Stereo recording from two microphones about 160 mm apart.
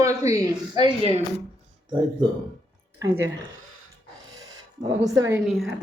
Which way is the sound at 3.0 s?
15° right (ahead or behind).